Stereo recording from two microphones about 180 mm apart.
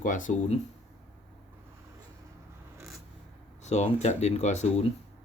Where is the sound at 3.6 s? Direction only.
40° left (ahead or behind).